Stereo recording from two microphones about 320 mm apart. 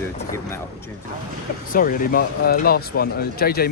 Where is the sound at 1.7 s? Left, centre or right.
Left.